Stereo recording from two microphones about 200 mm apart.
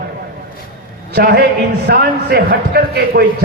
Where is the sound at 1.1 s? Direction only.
50° right (ahead or behind).